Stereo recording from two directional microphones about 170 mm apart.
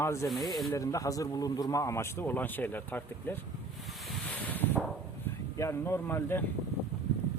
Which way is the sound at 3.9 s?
Centre (ahead or behind).